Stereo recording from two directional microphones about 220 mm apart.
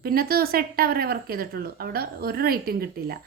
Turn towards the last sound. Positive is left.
turn(degrees=-45)  # may be behind; listen again after turning